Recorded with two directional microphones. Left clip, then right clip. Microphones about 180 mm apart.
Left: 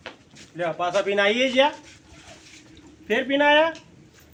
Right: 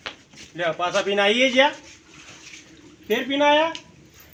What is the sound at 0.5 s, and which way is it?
Speech, 50° right (ahead or behind).